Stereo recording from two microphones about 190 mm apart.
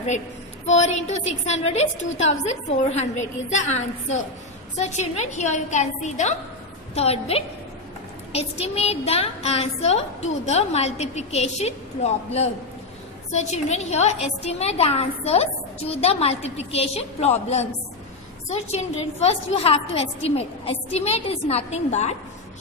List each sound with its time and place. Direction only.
0.7 s a woman's voice: 35° left (ahead or behind)